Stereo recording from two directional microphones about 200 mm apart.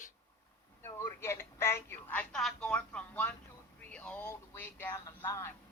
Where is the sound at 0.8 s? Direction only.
15° left (ahead or behind).